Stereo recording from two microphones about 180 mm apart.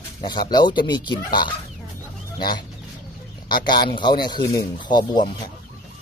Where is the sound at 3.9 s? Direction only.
25° left (ahead or behind).